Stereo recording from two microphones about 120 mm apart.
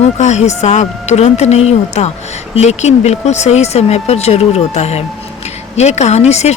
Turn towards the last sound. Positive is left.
turn(degrees=65)  # may be behind; listen again after turning